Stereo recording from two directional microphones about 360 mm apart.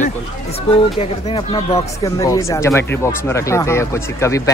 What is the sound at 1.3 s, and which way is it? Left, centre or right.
Speech, centre.